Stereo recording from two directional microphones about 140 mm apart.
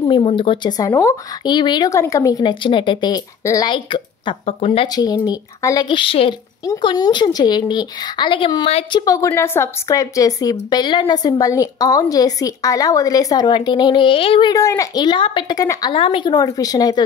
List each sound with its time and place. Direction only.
0.1 s speech: 40° left (ahead or behind)
0.7 s a woman's voice: 20° left (ahead or behind); by 4.8 s 40° left (ahead or behind)
4.8 s a woman's voice: 30° left (ahead or behind)
6.6 s speech: 30° left (ahead or behind)
8.9 s a woman's voice: 25° left (ahead or behind); by 14.5 s 40° left (ahead or behind)
14.5 s a woman's voice: 20° left (ahead or behind)
15.9 s speech: 40° left (ahead or behind)
16.3 s a woman's voice: 25° left (ahead or behind)